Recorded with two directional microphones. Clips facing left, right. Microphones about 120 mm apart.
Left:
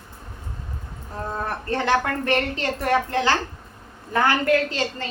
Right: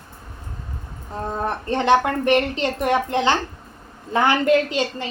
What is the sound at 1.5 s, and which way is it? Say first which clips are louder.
A woman's voice: right 5 dB; 20° right (ahead or behind).